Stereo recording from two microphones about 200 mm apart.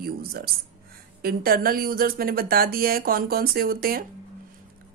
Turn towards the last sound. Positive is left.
turn(degrees=-50)  # may be behind; listen again after turning